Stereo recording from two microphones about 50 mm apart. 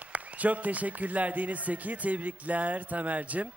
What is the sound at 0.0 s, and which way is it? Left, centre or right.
A man's voice, right.